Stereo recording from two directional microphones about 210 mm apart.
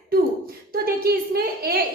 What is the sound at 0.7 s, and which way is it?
A woman's voice, 45° right (ahead or behind).